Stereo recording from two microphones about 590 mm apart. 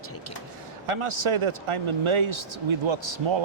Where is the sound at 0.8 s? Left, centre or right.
Right.